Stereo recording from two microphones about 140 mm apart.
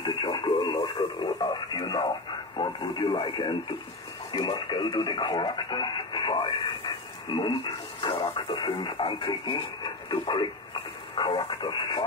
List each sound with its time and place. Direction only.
0.0 s speech: 30° left (ahead or behind)